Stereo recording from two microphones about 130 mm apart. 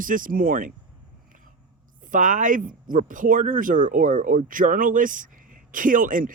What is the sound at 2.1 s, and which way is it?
Speech, 85° right.